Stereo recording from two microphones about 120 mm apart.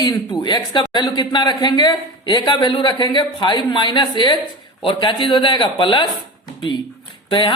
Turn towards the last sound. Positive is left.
turn(degrees=40)  # may be behind; listen again after turning